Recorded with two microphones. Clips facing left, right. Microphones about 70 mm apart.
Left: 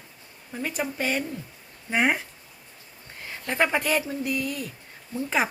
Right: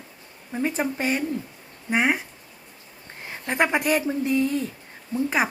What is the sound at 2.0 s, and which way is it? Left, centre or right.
Speech, centre.